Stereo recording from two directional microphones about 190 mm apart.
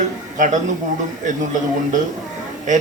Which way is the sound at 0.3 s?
40° right (ahead or behind).